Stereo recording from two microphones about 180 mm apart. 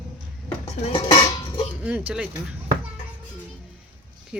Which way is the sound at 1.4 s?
25° left (ahead or behind).